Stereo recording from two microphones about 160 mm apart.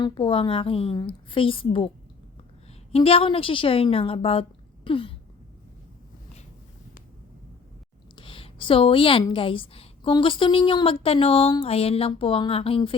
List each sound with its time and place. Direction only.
0.0 s a woman's voice: 30° left (ahead or behind)
2.9 s a woman's voice: 35° left (ahead or behind)
8.1 s a sound: 35° left (ahead or behind)
9.3 s a woman's voice: 35° left (ahead or behind)